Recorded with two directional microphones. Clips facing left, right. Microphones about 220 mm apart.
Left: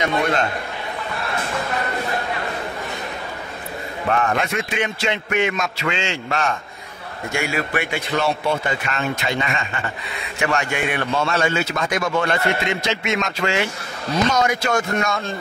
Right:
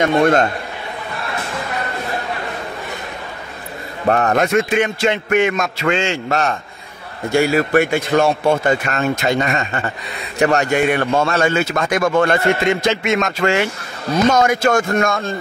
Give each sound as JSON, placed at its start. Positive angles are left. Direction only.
{"t": 0.0, "sound": "a man's voice", "side_deg": -45}
{"t": 4.1, "sound": "a man's voice", "side_deg": -40}